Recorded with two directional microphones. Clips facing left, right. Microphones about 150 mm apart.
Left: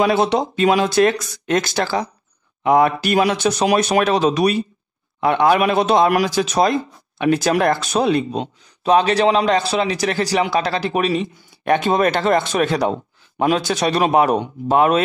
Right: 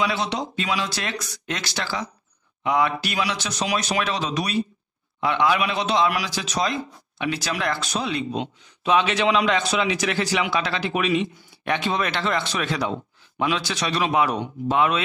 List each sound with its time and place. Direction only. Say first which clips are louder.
0.0 s a man's voice: left 8 dB; 50° left (ahead or behind)